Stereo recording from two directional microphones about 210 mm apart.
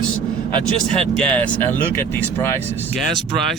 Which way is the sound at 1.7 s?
10° left (ahead or behind).